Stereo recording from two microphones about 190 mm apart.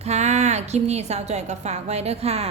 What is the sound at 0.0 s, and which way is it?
A woman's voice, 35° right (ahead or behind).